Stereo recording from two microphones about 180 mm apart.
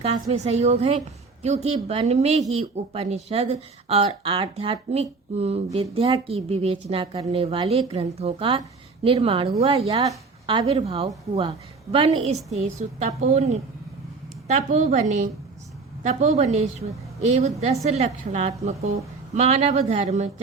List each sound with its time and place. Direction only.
0.0 s a woman's voice: 35° right (ahead or behind)
12.5 s speech: 40° right (ahead or behind)